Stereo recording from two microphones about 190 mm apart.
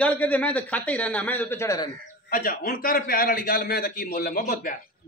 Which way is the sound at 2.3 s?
50° left (ahead or behind).